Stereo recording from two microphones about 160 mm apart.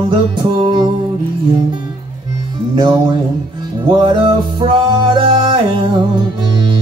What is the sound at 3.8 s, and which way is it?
Music, 30° right (ahead or behind).